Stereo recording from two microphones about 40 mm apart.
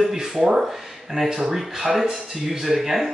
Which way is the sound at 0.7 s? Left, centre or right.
Centre.